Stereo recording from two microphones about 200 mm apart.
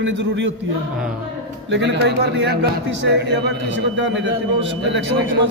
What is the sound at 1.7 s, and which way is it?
Speech, 60° right (ahead or behind).